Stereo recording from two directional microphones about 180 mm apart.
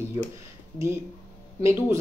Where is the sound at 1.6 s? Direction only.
15° right (ahead or behind).